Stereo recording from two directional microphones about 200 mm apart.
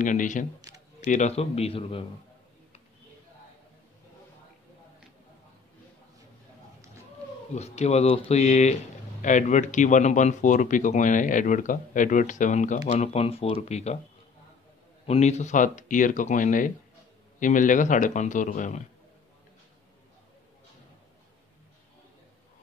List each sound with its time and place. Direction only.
0.0 s speech: 40° left (ahead or behind)
7.5 s speech: 35° left (ahead or behind)
15.0 s speech: 35° left (ahead or behind)